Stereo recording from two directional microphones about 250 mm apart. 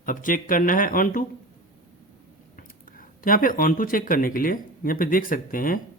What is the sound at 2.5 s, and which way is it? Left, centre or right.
Speech, left.